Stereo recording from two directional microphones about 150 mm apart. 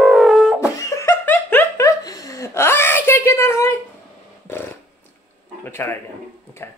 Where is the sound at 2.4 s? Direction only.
15° left (ahead or behind).